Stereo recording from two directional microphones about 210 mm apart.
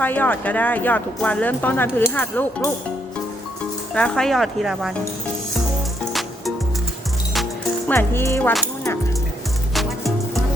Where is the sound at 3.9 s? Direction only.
5° left (ahead or behind).